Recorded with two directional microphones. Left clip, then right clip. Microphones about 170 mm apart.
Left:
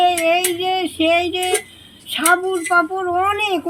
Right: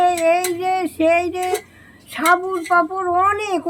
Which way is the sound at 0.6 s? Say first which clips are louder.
Even; 15° right (ahead or behind).